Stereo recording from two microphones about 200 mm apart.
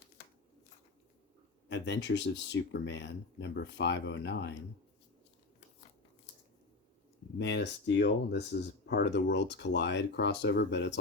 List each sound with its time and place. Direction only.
1.7 s speech: 60° left (ahead or behind)
7.3 s speech: 60° left (ahead or behind)